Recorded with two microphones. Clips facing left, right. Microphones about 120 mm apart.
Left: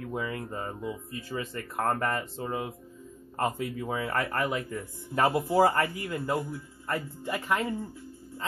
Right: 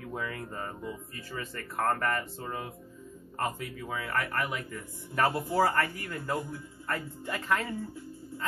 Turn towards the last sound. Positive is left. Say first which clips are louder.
# left 2 dB
turn(degrees=15)  # may be behind; listen again after turning